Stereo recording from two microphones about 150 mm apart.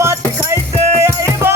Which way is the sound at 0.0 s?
20° right (ahead or behind).